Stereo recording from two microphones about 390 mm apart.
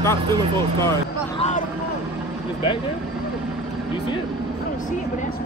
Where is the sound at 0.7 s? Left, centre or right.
Centre.